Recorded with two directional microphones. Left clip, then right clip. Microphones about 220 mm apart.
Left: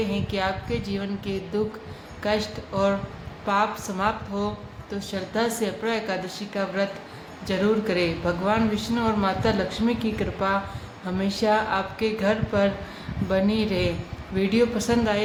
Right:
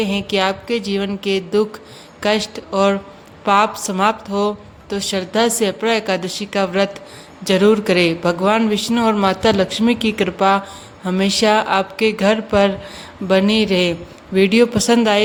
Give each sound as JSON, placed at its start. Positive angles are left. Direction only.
{"t": 0.0, "sound": "speech", "side_deg": -45}